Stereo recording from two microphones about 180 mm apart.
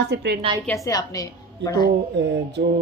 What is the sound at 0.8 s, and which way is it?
A woman's voice, 20° left (ahead or behind).